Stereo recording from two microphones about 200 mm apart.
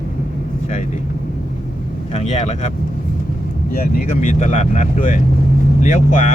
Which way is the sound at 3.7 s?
40° left (ahead or behind).